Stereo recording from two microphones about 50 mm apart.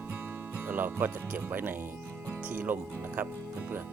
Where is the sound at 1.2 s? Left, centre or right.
Right.